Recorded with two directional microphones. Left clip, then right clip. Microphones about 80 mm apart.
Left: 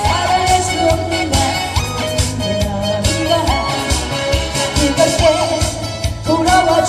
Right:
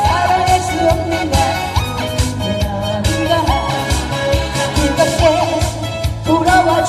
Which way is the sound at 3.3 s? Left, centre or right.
Left.